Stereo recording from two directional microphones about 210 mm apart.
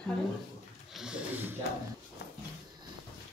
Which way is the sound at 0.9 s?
5° right (ahead or behind).